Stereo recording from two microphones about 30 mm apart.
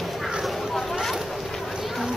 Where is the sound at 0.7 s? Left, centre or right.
Centre.